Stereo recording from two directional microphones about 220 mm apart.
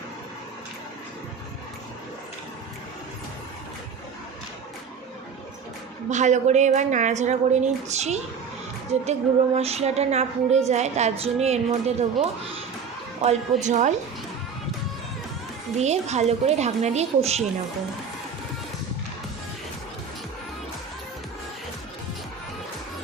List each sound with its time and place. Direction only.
6.1 s a woman's voice: 35° right (ahead or behind)
15.8 s speech: 30° right (ahead or behind)